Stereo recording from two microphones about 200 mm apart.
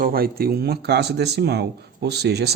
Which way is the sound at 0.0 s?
50° right (ahead or behind).